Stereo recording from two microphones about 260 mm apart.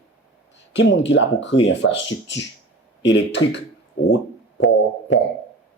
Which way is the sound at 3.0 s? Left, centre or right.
Left.